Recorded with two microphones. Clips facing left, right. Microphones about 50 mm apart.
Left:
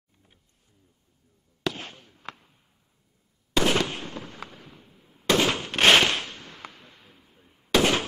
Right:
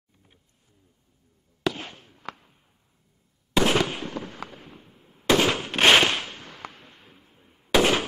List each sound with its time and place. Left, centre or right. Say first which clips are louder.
1.6 s fireworks: right 3 dB; centre
2.1 s arrow: right 4 dB; right
3.5 s fireworks: right 2 dB; centre
4.3 s fireworks: right 2 dB; right
4.8 s fireworks: right 2 dB; right
5.2 s fireworks: right 2 dB; centre
6.7 s a sound: right 1 dB; right
7.3 s firecracker: right 2 dB; centre